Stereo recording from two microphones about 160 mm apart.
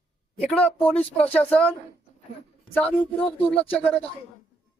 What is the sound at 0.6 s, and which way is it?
Speech, 10° left (ahead or behind).